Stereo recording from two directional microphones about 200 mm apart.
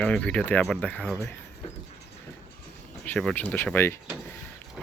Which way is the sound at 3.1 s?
5° left (ahead or behind).